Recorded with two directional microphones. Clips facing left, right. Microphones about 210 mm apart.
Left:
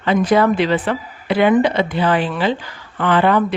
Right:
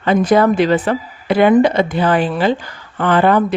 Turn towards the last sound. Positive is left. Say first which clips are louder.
# right 2 dB
turn(degrees=-45)  # may be behind; listen again after turning